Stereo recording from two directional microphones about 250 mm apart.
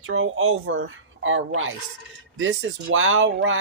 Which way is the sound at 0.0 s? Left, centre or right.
Right.